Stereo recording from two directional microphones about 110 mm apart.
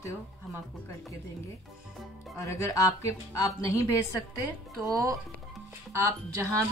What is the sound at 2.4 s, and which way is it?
A woman's voice, 25° left (ahead or behind).